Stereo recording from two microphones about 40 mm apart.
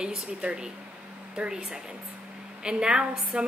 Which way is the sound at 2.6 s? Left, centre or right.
Right.